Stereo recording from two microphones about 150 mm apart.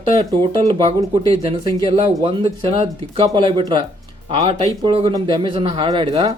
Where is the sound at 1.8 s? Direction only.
35° right (ahead or behind).